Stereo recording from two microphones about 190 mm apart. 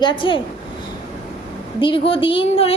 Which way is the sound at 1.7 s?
25° left (ahead or behind).